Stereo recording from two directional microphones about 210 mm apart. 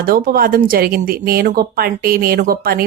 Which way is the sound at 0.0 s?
45° right (ahead or behind).